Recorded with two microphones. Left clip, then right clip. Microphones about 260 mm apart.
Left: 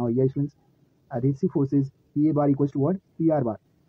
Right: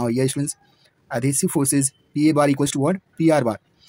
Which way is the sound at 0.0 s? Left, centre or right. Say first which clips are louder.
Right 2 dB; right.